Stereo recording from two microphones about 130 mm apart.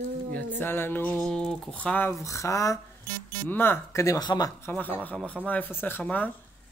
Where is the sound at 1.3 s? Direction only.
5° left (ahead or behind).